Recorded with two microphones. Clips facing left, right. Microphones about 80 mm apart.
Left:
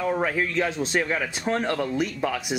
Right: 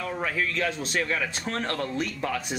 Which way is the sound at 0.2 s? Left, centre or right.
Centre.